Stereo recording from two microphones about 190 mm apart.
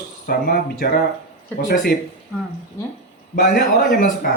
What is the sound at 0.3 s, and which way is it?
Speech, 50° left (ahead or behind).